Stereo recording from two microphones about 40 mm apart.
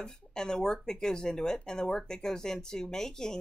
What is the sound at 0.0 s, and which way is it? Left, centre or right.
Speech, centre.